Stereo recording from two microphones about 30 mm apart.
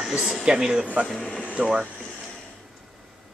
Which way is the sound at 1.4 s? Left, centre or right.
Right.